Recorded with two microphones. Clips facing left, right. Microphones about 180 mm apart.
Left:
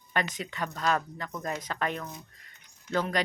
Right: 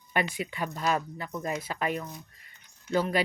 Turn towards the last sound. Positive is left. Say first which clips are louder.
# right 2 dB
turn(degrees=-5)  # may be behind; listen again after turning